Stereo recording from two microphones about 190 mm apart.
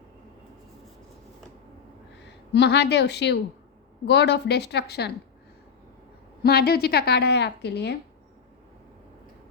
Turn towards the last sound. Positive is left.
turn(degrees=60)  # may be behind; listen again after turning